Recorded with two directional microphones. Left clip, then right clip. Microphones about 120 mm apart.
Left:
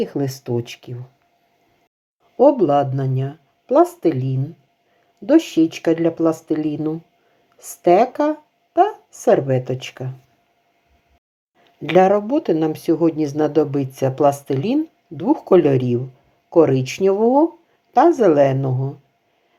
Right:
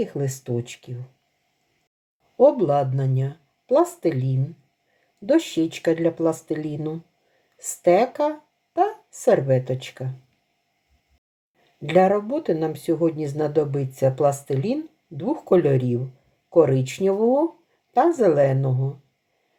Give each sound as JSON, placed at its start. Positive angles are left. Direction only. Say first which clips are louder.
{"t": 0.0, "sound": "speech", "louder": "left 4 dB", "side_deg": 35}
{"t": 2.4, "sound": "speech", "louder": "left 3 dB", "side_deg": 35}
{"t": 11.8, "sound": "speech", "louder": "left 4 dB", "side_deg": 35}